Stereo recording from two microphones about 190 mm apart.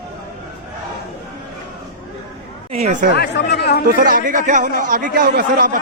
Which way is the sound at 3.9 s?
50° right (ahead or behind).